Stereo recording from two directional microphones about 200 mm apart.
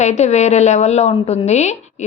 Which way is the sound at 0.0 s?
35° left (ahead or behind).